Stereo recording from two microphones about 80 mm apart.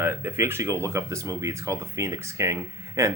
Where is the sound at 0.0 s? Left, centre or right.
Right.